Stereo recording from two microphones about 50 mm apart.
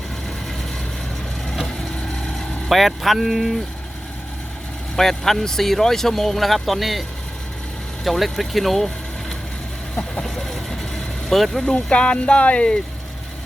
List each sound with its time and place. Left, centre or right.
2.6 s speech: centre
4.9 s speech: centre
8.0 s speech: centre
10.2 s vehicle: centre
11.3 s speech: centre
11.6 s speech: centre